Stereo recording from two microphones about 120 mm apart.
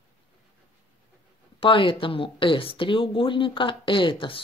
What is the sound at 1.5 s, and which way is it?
Speech, 45° left (ahead or behind).